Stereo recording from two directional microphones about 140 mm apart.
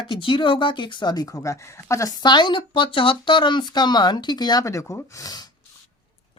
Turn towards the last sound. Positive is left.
turn(degrees=25)  # may be behind; listen again after turning